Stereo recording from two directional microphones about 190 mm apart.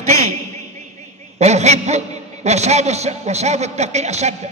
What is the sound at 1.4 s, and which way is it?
A man's voice, 35° right (ahead or behind).